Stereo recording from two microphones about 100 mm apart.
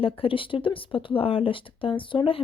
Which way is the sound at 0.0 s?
65° left (ahead or behind).